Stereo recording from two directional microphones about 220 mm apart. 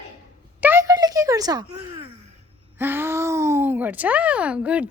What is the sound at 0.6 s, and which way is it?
Speech, 10° right (ahead or behind).